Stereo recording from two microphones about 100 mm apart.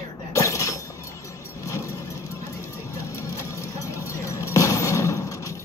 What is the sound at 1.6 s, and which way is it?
Vehicle, 30° left (ahead or behind).